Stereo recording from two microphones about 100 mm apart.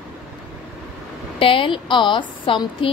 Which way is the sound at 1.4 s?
60° left (ahead or behind).